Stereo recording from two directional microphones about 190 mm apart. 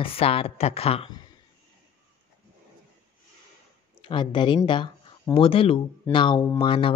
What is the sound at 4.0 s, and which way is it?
Speech, 25° left (ahead or behind).